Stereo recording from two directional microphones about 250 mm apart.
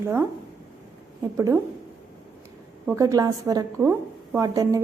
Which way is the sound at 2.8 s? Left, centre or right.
Centre.